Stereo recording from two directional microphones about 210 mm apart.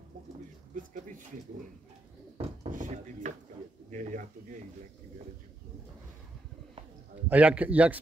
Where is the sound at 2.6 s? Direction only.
35° right (ahead or behind).